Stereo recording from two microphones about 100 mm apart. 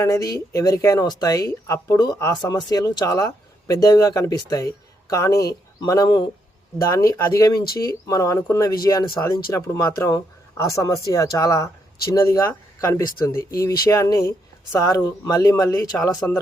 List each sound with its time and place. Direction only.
0.0 s speech: 35° left (ahead or behind)
2.3 s speech: 45° left (ahead or behind)
6.7 s speech: 30° left (ahead or behind)